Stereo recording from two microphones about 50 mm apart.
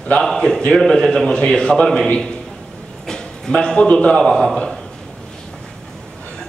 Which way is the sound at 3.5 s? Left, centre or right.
Centre.